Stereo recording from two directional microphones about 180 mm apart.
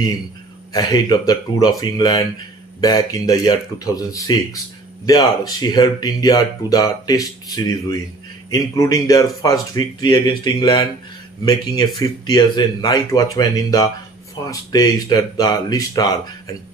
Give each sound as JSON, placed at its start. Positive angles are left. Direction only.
{"t": 0.7, "sound": "speech", "side_deg": 25}